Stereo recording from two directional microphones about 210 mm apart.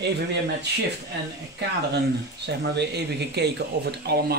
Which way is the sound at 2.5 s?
50° right (ahead or behind).